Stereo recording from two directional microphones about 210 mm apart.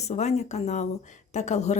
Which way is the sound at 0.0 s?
30° left (ahead or behind).